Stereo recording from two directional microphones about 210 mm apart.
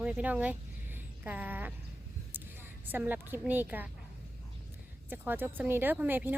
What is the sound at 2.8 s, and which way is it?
Speech, 10° right (ahead or behind).